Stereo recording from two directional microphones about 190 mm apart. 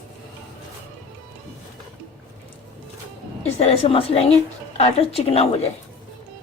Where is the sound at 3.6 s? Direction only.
30° left (ahead or behind).